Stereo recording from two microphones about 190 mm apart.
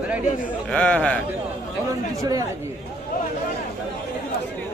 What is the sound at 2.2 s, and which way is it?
Speech, 20° right (ahead or behind).